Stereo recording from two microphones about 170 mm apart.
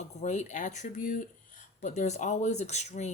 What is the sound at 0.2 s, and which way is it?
Speech, 45° left (ahead or behind).